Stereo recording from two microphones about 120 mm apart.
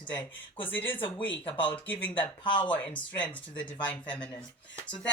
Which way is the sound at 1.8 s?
15° left (ahead or behind).